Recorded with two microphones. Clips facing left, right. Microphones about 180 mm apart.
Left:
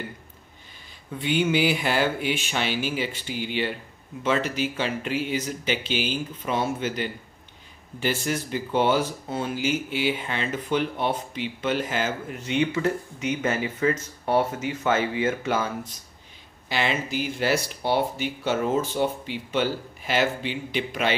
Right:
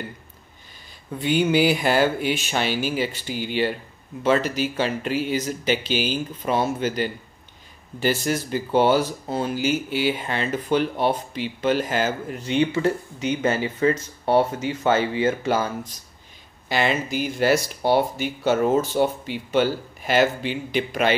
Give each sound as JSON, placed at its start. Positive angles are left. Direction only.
{"t": 1.1, "sound": "speech", "side_deg": -40}
{"t": 16.6, "sound": "speech", "side_deg": -45}